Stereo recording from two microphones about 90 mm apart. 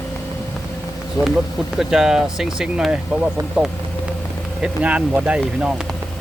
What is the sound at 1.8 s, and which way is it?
Speech, 5° right (ahead or behind).